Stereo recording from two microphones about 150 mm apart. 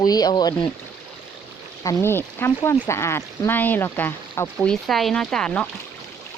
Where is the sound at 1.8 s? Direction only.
20° left (ahead or behind).